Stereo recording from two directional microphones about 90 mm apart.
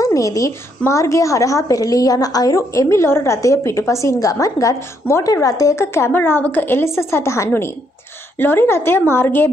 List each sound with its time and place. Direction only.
0.0 s a woman's voice: 40° left (ahead or behind)